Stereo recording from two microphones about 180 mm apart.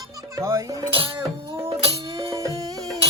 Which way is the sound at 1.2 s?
15° right (ahead or behind).